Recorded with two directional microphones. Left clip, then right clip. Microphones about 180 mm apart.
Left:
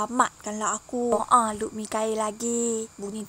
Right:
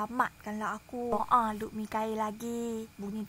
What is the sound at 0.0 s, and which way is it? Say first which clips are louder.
Speech: left 7 dB; 45° left (ahead or behind).